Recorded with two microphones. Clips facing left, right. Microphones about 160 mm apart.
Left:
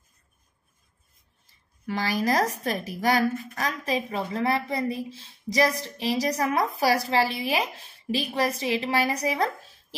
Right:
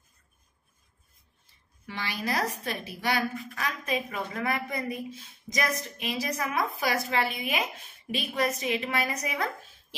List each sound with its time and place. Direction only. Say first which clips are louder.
1.9 s a woman's voice: left 7 dB; 40° left (ahead or behind)